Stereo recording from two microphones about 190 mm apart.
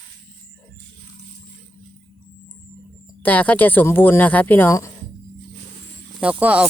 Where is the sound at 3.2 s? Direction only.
10° left (ahead or behind).